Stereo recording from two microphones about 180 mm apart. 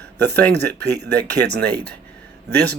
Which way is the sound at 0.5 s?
65° right (ahead or behind).